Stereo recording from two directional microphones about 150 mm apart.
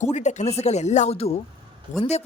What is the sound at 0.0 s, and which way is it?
A woman's voice, 50° left (ahead or behind).